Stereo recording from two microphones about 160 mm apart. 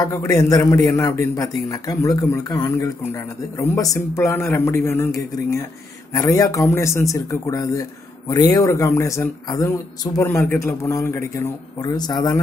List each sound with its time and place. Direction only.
0.0 s a man's voice: 20° left (ahead or behind)